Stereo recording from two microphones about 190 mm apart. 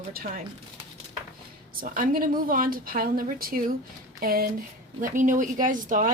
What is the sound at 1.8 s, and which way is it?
A woman's voice, 50° right (ahead or behind).